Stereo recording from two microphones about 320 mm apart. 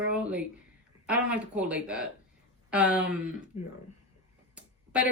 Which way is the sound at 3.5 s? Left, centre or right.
Left.